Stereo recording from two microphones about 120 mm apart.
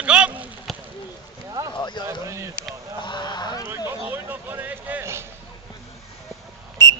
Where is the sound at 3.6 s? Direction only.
20° right (ahead or behind).